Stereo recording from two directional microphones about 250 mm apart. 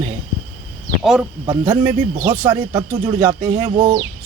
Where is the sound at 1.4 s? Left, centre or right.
Centre.